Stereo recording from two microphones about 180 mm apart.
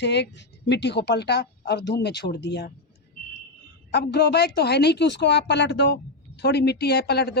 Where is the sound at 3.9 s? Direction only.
65° left (ahead or behind).